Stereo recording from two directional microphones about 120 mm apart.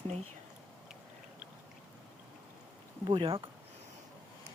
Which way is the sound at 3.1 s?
45° right (ahead or behind).